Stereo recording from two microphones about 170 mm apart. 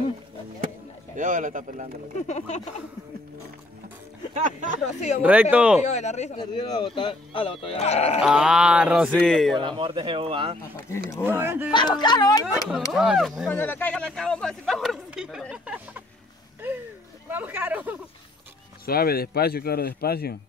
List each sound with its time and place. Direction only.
1.1 s speech: 50° right (ahead or behind)
2.2 s speech: 40° left (ahead or behind)
4.3 s speech: 50° right (ahead or behind)
5.2 s speech: 10° right (ahead or behind)
5.8 s speech: 40° left (ahead or behind)
6.4 s speech: 25° left (ahead or behind)
8.2 s speech: 5° right (ahead or behind)
9.6 s speech: 30° right (ahead or behind)
11.2 s speech: 10° right (ahead or behind)
11.7 s speech: 25° left (ahead or behind)
12.9 s speech: centre (ahead or behind)
13.5 s speech: 10° left (ahead or behind); by 16.0 s 10° right (ahead or behind)
17.3 s speech: 10° right (ahead or behind)
18.9 s speech: 65° left (ahead or behind)